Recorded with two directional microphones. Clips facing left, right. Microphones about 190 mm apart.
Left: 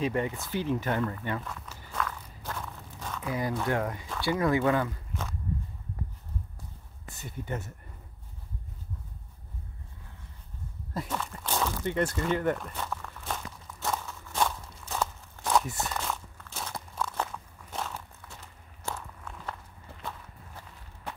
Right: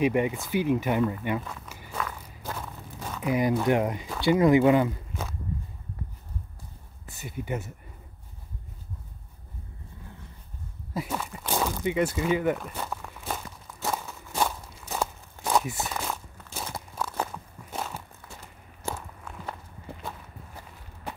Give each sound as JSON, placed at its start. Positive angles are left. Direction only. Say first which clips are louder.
{"t": 0.0, "sound": "speech", "louder": "right 5 dB", "side_deg": -15}
{"t": 1.5, "sound": "walk", "louder": "right 2 dB", "side_deg": -10}
{"t": 4.2, "sound": "speech", "louder": "right 7 dB", "side_deg": -20}
{"t": 7.2, "sound": "speech", "louder": "right 4 dB", "side_deg": -10}
{"t": 10.9, "sound": "a sound", "louder": "right 2 dB", "side_deg": -5}
{"t": 17.6, "sound": "walk", "louder": "right 1 dB", "side_deg": -10}